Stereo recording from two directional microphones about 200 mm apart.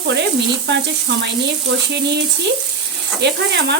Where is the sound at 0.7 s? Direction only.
60° right (ahead or behind).